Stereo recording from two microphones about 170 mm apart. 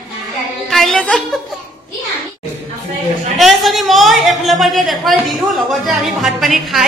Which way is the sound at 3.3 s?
Centre (ahead or behind).